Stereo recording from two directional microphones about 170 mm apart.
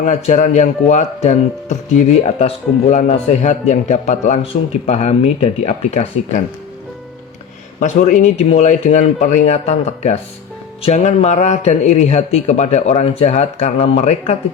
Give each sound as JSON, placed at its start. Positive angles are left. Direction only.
{"t": 0.0, "sound": "a man's voice", "side_deg": 50}
{"t": 7.8, "sound": "a man's voice", "side_deg": 50}